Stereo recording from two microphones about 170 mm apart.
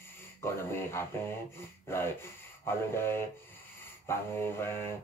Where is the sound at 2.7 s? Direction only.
15° left (ahead or behind).